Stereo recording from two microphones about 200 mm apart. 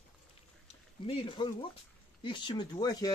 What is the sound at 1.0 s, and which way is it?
A man's voice, 25° left (ahead or behind).